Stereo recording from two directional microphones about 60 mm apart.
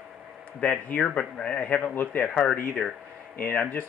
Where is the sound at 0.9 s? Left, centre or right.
Left.